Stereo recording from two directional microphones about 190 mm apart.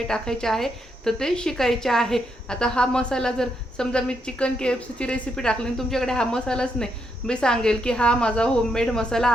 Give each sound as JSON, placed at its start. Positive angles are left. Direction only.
{"t": 0.1, "sound": "a woman's voice", "side_deg": 5}